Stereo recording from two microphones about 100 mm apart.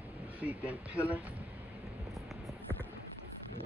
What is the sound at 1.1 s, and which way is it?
Speech, 15° right (ahead or behind).